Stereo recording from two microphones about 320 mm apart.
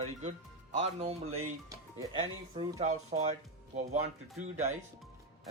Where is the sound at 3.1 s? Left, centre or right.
Right.